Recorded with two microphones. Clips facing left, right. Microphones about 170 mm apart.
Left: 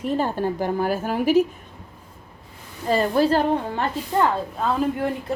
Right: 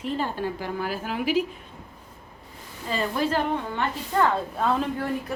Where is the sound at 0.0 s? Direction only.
45° left (ahead or behind).